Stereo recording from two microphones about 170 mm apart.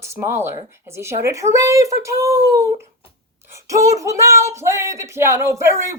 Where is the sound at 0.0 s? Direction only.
15° right (ahead or behind).